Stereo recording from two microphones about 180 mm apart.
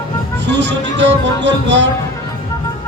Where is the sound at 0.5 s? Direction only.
80° right.